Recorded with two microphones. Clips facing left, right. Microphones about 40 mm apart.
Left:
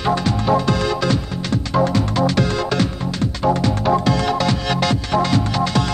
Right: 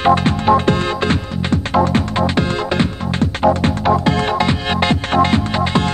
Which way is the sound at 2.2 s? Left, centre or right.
Right.